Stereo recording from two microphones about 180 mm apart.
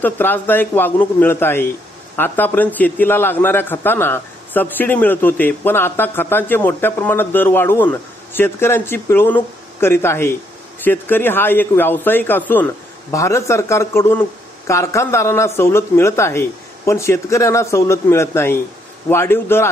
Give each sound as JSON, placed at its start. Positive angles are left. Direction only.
{"t": 0.0, "sound": "a man's voice", "side_deg": 10}